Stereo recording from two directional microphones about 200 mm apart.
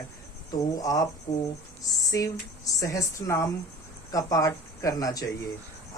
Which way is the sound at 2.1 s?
15° left (ahead or behind).